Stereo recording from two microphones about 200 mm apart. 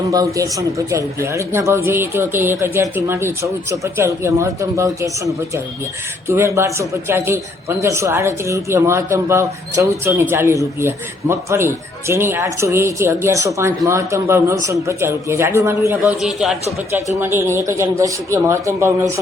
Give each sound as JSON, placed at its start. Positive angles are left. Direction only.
{"t": 0.3, "sound": "speech", "side_deg": -15}
{"t": 16.2, "sound": "a man's voice", "side_deg": 0}
{"t": 17.2, "sound": "speech", "side_deg": -15}